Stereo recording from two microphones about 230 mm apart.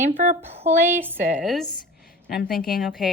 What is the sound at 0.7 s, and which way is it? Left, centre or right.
A woman's voice, centre.